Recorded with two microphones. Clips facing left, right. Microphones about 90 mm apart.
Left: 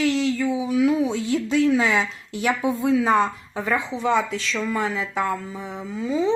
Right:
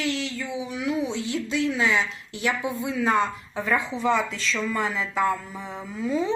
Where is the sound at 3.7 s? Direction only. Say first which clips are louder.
Left 2 dB; centre (ahead or behind).